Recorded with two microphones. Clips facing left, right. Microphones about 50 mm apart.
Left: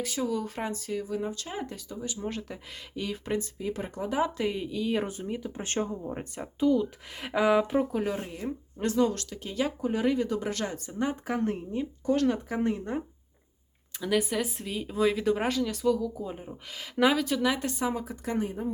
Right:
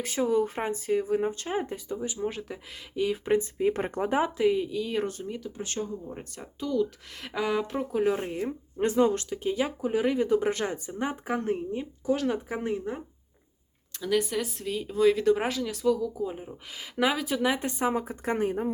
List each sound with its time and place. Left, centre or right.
0.0 s speech: right
2.1 s speech: centre
3.6 s speech: right
4.4 s speech: centre
5.5 s speech: left
6.1 s speech: centre
7.9 s speech: centre
11.3 s speech: centre
13.9 s speech: centre
17.4 s speech: right